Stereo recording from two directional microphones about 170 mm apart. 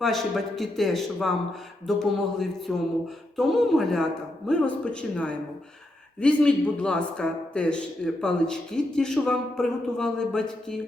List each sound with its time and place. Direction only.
0.0 s speech: centre (ahead or behind)